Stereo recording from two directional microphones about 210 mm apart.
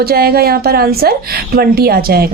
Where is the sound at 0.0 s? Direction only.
45° right (ahead or behind).